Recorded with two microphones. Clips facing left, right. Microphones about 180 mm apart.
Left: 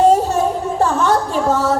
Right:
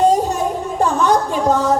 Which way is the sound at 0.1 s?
15° right (ahead or behind).